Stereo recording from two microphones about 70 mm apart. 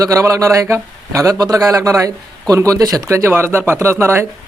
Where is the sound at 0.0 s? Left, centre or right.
Right.